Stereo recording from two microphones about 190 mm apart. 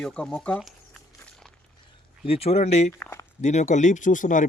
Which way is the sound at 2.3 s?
30° left (ahead or behind).